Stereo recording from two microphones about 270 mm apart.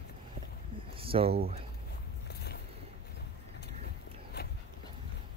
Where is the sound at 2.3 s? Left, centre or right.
Left.